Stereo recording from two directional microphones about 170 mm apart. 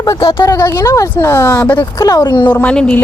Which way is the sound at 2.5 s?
5° left (ahead or behind).